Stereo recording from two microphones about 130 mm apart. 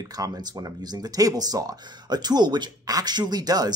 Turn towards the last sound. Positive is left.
turn(degrees=-30)  # may be behind; listen again after turning